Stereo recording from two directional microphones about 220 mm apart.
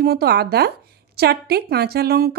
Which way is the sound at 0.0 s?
45° right (ahead or behind).